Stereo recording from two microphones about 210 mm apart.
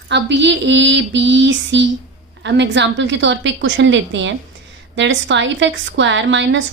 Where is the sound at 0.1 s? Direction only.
55° right (ahead or behind).